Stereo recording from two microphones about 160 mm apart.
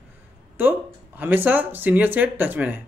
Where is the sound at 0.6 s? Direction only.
15° right (ahead or behind).